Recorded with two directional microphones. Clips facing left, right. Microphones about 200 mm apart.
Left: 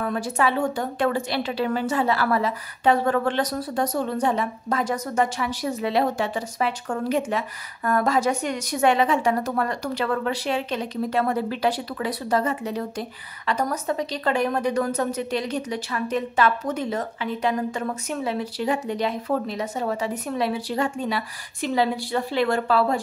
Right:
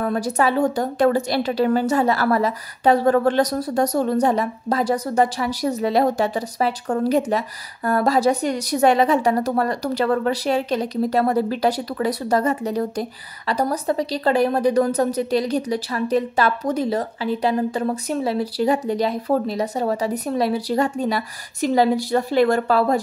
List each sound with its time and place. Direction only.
0.0 s speech: 40° right (ahead or behind)